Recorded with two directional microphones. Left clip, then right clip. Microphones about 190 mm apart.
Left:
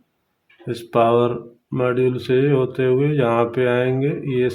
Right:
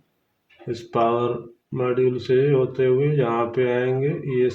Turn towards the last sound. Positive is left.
turn(degrees=55)  # may be behind; listen again after turning